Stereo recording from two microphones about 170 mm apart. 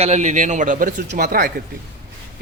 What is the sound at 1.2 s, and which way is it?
Speech, 65° right (ahead or behind).